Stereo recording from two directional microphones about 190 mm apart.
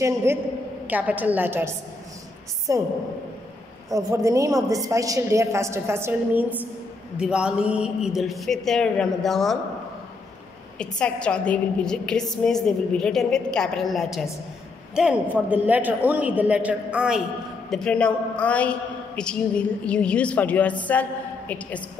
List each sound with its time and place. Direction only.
0.0 s a woman's voice: 15° right (ahead or behind)
3.9 s a woman's voice: 15° right (ahead or behind); by 9.6 s centre (ahead or behind)
10.8 s a man's voice: 5° left (ahead or behind)